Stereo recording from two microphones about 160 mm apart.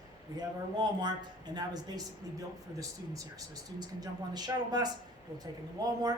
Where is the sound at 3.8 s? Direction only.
25° right (ahead or behind).